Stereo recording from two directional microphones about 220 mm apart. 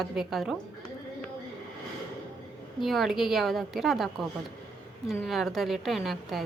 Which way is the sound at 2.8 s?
Centre (ahead or behind).